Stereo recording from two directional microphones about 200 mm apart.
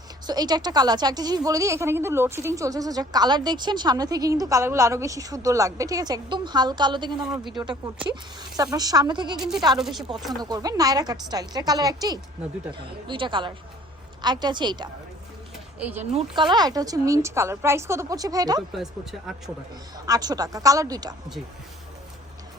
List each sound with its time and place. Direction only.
0.3 s a woman's voice: 20° right (ahead or behind)
9.7 s chopping: centre (ahead or behind)
10.4 s a woman's voice: 20° right (ahead or behind)
16.0 s a woman's voice: 30° right (ahead or behind)
20.1 s a woman's voice: 20° right (ahead or behind)